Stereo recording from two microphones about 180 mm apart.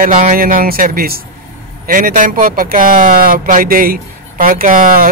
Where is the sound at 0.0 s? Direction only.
45° right (ahead or behind).